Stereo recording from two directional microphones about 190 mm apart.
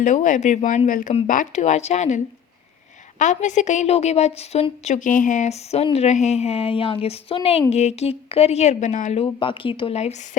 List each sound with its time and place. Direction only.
0.0 s speech: 40° left (ahead or behind)
9.2 s speech: 25° left (ahead or behind)